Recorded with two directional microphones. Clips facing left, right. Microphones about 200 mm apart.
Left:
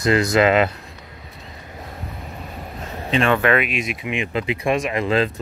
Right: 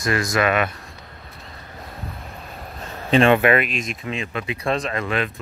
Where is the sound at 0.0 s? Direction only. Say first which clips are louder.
Left 5 dB; 20° left (ahead or behind).